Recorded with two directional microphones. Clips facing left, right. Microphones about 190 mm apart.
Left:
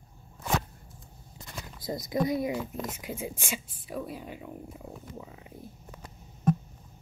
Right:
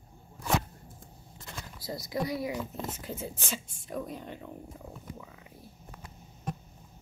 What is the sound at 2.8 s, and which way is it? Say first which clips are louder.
Speech: left 2 dB; 10° left (ahead or behind).